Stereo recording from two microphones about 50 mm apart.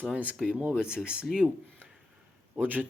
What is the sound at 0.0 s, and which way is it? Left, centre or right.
Speech, right.